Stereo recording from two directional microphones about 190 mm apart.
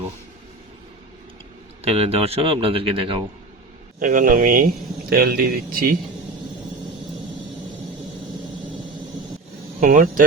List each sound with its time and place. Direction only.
1.8 s a man's voice: 35° right (ahead or behind)
4.0 s speech: 45° right (ahead or behind)
9.8 s speech: 45° right (ahead or behind)